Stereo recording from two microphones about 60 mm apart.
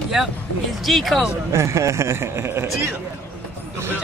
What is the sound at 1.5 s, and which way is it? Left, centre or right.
Speech, right.